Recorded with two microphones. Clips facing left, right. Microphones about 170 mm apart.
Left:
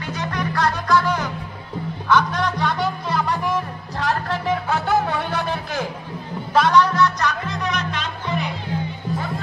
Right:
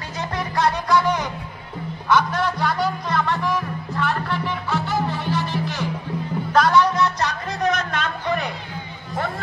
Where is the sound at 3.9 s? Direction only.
40° left (ahead or behind).